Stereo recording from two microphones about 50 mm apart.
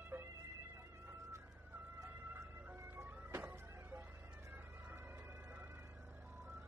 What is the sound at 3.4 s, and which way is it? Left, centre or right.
Music, right.